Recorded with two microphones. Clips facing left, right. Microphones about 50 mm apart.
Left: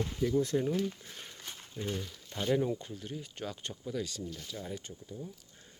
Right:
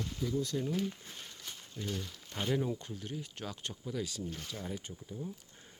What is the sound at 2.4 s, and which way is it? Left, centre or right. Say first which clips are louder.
Speech: left 3 dB; centre.